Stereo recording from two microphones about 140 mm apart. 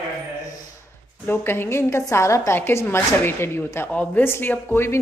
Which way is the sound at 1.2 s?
15° left (ahead or behind).